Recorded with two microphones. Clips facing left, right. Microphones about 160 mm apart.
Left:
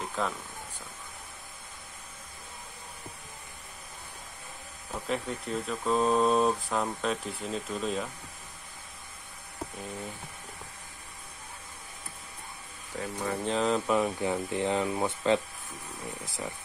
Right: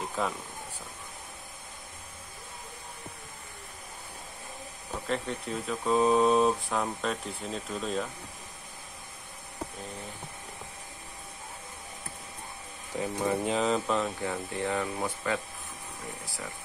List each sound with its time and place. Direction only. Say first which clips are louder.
0.2 s speech: right 1 dB; 5° right (ahead or behind)
5.0 s speech: even; centre (ahead or behind)
13.0 s speech: right 4 dB; 20° right (ahead or behind)
13.5 s speech: even; centre (ahead or behind)
13.9 s speech: left 3 dB; 15° left (ahead or behind)